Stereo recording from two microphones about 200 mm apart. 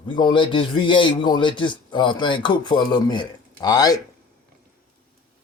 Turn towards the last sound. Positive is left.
turn(degrees=20)  # may be behind; listen again after turning